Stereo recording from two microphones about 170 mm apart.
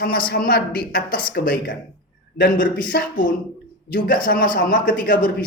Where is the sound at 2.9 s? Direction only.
65° left (ahead or behind).